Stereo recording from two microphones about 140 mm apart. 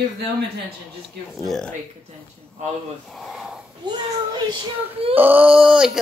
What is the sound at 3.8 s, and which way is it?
A child's voice, 35° right (ahead or behind).